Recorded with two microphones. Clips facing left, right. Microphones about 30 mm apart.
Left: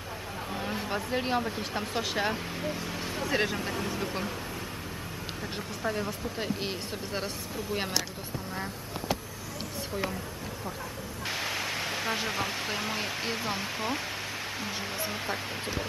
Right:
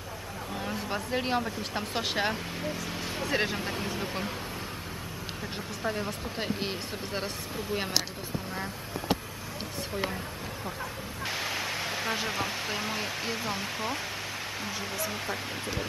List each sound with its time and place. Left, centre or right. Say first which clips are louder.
0.8 s speech: even; centre
2.0 s speech: right 1 dB; centre
2.3 s speech: left 1 dB; centre
5.9 s speech: left 1 dB; centre
11.2 s speech: even; centre
15.0 s speech: even; centre